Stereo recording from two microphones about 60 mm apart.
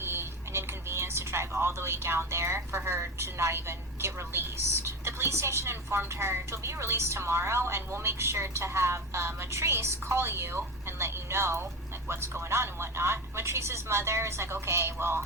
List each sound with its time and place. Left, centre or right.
0.0 s speech: right